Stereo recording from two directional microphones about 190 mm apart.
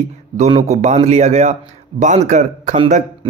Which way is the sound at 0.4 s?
35° right (ahead or behind).